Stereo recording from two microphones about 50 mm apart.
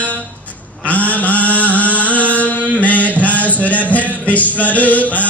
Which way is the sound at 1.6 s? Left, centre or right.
Left.